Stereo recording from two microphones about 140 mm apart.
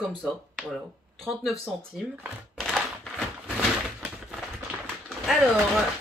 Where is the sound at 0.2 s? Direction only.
Centre (ahead or behind).